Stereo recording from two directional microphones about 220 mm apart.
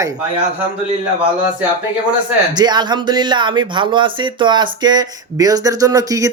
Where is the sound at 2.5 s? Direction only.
20° right (ahead or behind).